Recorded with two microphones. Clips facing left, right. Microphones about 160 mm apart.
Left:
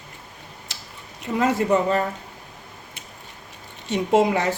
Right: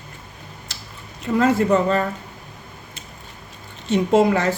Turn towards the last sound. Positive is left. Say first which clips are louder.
# right 2 dB
turn(degrees=15)  # may be behind; listen again after turning